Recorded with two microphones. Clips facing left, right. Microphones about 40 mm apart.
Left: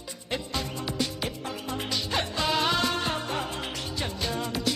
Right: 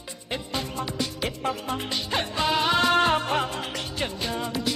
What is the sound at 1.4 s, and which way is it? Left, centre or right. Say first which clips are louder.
Speech: right 6 dB; right.